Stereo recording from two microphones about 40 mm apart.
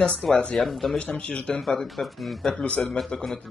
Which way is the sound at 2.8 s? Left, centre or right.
Left.